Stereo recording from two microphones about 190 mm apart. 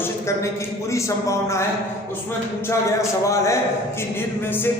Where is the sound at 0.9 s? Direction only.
15° left (ahead or behind).